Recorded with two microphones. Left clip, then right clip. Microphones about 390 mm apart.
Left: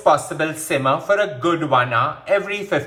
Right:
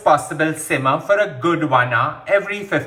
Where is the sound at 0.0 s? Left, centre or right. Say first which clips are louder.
Right 1 dB; centre.